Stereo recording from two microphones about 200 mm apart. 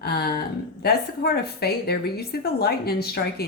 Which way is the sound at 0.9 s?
50° left (ahead or behind).